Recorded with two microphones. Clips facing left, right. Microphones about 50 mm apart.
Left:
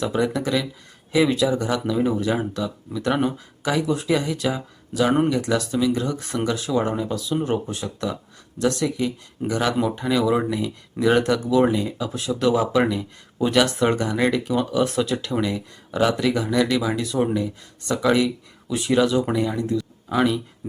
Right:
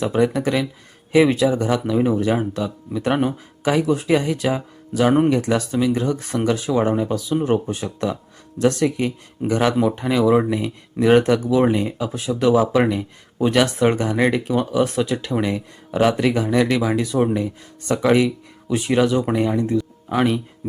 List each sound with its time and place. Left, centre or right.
0.0 s speech: right
11.4 s speech: centre
11.7 s speech: right